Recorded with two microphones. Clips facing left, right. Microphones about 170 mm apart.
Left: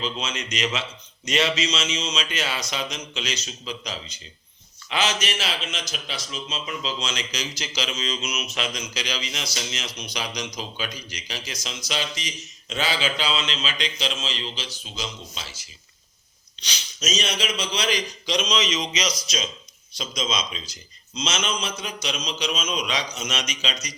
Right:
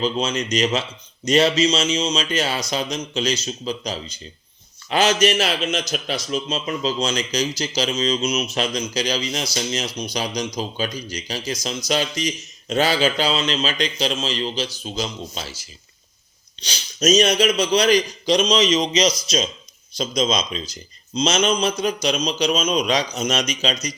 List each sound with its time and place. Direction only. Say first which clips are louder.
0.0 s speech: right 8 dB; 35° right (ahead or behind)
16.6 s speech: right 12 dB; 35° right (ahead or behind)